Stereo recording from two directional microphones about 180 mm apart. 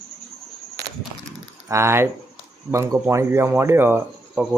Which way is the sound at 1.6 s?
15° right (ahead or behind).